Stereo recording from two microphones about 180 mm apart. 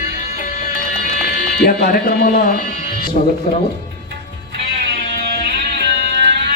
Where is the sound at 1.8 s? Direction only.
55° left (ahead or behind).